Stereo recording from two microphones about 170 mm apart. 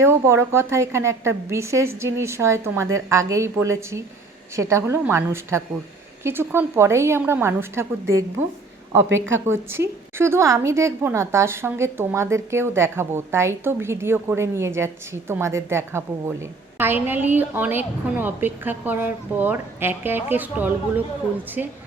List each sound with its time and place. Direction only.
0.0 s a woman's voice: 15° right (ahead or behind)
9.0 s a woman's voice: 90° right
9.5 s a woman's voice: 15° right (ahead or behind)